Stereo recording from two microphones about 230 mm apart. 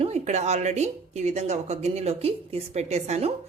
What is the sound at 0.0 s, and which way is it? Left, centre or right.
A woman's voice, right.